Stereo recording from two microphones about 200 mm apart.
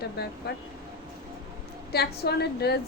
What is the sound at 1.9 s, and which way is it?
Speech, 55° left (ahead or behind).